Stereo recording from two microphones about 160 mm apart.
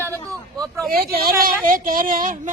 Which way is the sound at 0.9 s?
65° right (ahead or behind).